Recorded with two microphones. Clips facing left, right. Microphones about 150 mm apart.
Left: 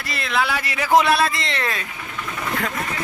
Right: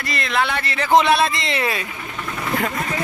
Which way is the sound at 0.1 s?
Centre (ahead or behind).